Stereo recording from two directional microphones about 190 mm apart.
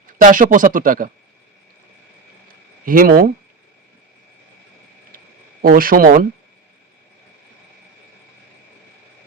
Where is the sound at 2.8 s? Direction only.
50° right (ahead or behind).